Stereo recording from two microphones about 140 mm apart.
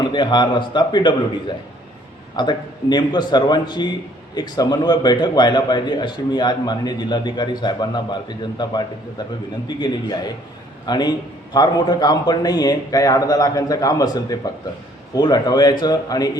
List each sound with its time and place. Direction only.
0.0 s a man's voice: 30° left (ahead or behind)